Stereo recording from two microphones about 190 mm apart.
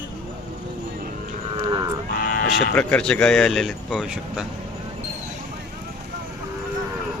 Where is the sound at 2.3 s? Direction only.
50° left (ahead or behind).